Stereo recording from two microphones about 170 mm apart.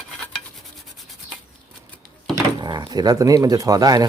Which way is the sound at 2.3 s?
25° right (ahead or behind).